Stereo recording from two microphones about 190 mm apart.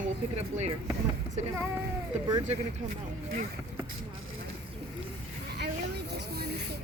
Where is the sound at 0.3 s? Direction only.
35° right (ahead or behind).